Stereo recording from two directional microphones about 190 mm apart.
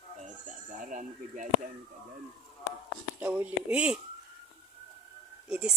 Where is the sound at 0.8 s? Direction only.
45° right (ahead or behind).